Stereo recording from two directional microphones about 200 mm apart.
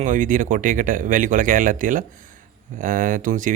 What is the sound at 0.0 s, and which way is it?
Speech, 40° right (ahead or behind).